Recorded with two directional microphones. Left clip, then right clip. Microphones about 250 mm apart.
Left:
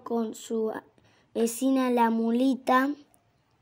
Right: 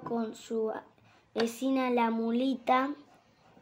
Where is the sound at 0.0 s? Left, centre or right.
Left.